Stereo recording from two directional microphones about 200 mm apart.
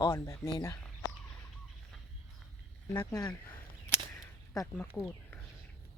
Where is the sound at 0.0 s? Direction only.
20° left (ahead or behind).